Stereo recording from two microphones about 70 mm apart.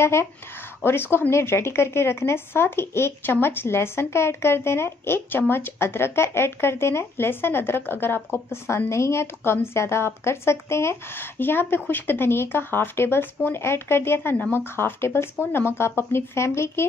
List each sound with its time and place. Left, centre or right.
0.0 s speech: left